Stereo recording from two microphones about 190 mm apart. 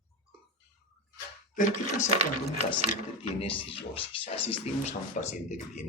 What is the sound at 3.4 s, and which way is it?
Speech, 30° left (ahead or behind).